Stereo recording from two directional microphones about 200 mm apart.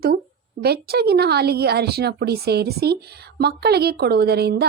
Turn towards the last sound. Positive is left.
turn(degrees=-55)  # may be behind; listen again after turning